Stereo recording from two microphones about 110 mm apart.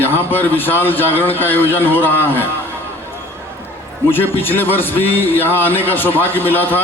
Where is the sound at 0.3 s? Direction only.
20° left (ahead or behind).